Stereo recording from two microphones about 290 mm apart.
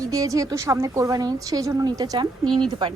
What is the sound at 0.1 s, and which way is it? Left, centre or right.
A woman's voice, centre.